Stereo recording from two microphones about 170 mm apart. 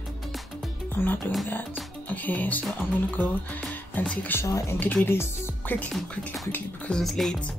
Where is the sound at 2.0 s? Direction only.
10° left (ahead or behind).